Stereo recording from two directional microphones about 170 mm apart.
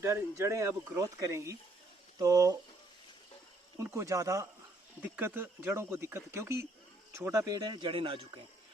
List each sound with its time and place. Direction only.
0.0 s speech: 15° right (ahead or behind)
3.8 s speech: 15° right (ahead or behind); by 8.2 s 30° right (ahead or behind)